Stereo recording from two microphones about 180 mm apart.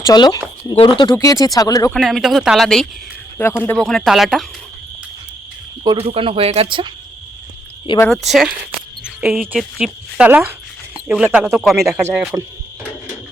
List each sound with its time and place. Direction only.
0.0 s speech: 20° left (ahead or behind)
1.9 s speech: centre (ahead or behind)
5.8 s speech: 25° right (ahead or behind)
8.1 s speech: centre (ahead or behind)
9.0 s cricket: 5° right (ahead or behind)
9.5 s speech: 5° right (ahead or behind)